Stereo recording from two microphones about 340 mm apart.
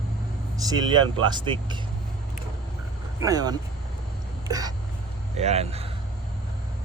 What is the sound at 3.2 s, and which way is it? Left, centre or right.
Speech, centre.